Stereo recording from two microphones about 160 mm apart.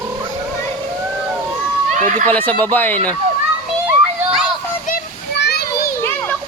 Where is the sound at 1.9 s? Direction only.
50° right (ahead or behind).